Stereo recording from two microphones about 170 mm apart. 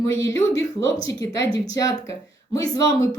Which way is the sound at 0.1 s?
20° left (ahead or behind).